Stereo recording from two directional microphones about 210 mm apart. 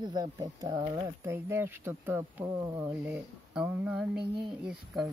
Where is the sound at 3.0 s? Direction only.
5° right (ahead or behind).